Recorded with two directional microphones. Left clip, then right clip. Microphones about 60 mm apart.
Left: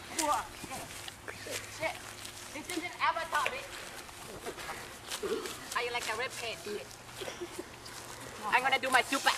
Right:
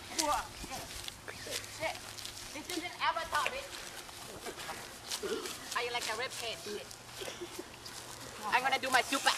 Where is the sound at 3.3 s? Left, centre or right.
Centre.